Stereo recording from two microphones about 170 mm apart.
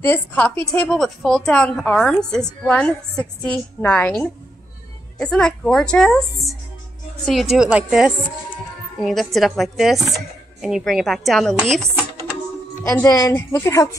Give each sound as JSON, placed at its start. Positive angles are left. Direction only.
{"t": 0.0, "sound": "a woman's voice", "side_deg": 10}
{"t": 5.2, "sound": "speech", "side_deg": 5}
{"t": 12.9, "sound": "a woman's voice", "side_deg": 20}